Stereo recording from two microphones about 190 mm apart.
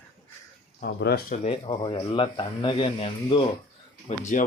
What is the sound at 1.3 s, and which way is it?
Speech, 35° left (ahead or behind).